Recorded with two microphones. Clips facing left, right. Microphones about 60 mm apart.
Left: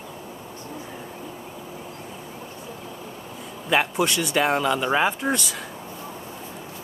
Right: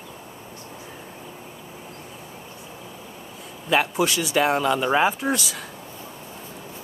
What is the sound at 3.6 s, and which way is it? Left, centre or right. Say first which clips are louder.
Speech: right 1 dB; centre.